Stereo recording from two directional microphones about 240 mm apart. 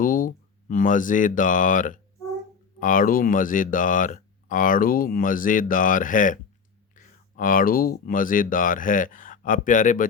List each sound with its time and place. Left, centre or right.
0.0 s speech: left